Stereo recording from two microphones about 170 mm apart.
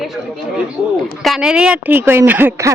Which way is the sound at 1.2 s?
Centre (ahead or behind).